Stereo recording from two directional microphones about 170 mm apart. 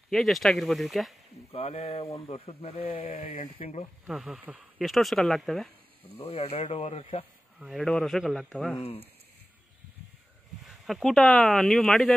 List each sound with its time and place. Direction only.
0.1 s speech: centre (ahead or behind)
1.5 s speech: 35° left (ahead or behind)
4.1 s speech: 5° right (ahead or behind)
6.1 s speech: 35° left (ahead or behind)
7.5 s speech: centre (ahead or behind)
10.7 s speech: centre (ahead or behind)